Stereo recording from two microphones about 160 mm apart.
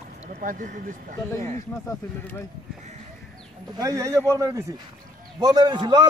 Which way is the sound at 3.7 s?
20° right (ahead or behind).